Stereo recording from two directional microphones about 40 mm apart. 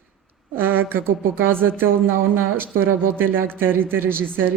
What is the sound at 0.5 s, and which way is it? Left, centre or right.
Speech, right.